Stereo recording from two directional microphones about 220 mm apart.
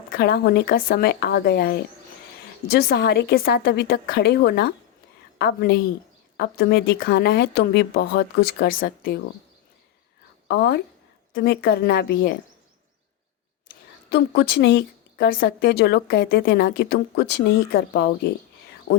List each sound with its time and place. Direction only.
0.1 s speech: 45° left (ahead or behind)
10.5 s speech: 50° left (ahead or behind)
14.1 s a woman's voice: 50° left (ahead or behind)